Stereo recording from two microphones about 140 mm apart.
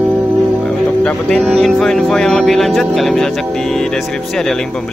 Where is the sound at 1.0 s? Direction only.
5° left (ahead or behind).